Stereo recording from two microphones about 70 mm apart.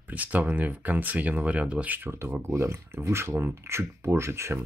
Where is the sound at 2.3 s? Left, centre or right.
Right.